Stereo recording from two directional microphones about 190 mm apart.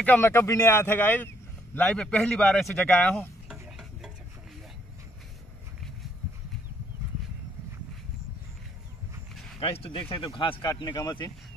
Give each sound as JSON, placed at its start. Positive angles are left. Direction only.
{"t": 0.0, "sound": "speech", "side_deg": 10}
{"t": 9.6, "sound": "speech", "side_deg": 30}